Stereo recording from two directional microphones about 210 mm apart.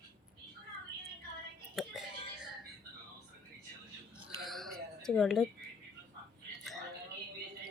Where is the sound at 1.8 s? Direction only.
Centre (ahead or behind).